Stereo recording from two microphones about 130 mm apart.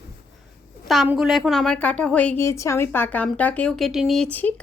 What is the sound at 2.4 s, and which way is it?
A woman's voice, 20° left (ahead or behind).